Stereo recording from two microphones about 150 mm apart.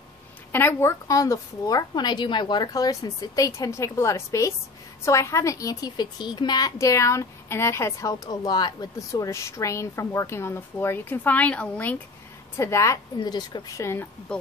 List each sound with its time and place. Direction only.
0.5 s a woman's voice: 15° left (ahead or behind)
14.3 s speech: 5° left (ahead or behind)